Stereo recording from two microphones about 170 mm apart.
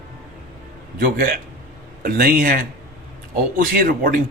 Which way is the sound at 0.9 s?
60° right (ahead or behind).